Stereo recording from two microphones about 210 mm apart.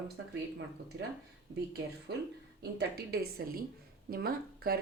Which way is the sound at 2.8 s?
50° right (ahead or behind).